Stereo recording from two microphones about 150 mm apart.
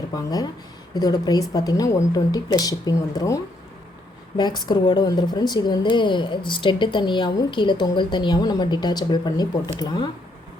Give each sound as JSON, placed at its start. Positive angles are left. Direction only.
{"t": 0.1, "sound": "a woman's voice", "side_deg": 25}